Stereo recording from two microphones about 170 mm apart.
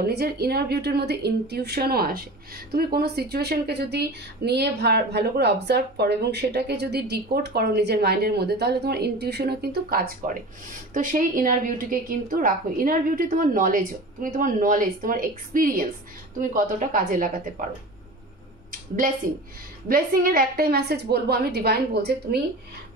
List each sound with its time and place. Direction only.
0.0 s a woman's voice: 70° right (ahead or behind)
18.7 s a sound: 55° right (ahead or behind)
19.9 s a woman's voice: 60° right (ahead or behind)